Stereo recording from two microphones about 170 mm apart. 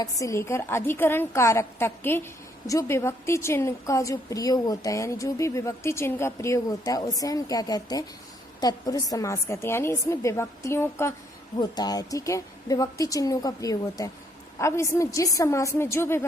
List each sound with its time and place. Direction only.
0.0 s a woman's voice: 20° left (ahead or behind)